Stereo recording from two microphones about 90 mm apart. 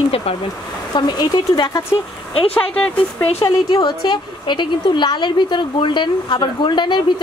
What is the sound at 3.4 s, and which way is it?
A woman's voice, 45° left (ahead or behind).